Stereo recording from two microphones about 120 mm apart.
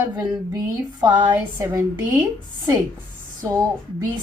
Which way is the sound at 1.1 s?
15° right (ahead or behind).